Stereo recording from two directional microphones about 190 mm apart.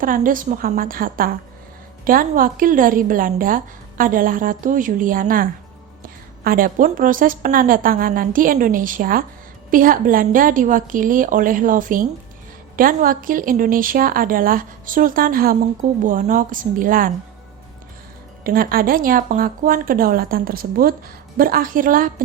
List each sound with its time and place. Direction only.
0.0 s a woman's voice: 45° right (ahead or behind)
18.4 s a woman's voice: 50° right (ahead or behind)